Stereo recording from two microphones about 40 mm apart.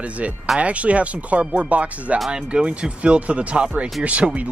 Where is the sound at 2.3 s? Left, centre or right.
Right.